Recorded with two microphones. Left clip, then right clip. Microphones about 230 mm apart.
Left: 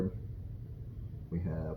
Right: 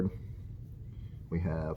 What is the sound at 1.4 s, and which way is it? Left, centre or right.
Speech, right.